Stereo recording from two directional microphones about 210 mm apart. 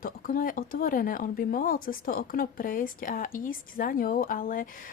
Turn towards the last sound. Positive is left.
turn(degrees=40)  # may be behind; listen again after turning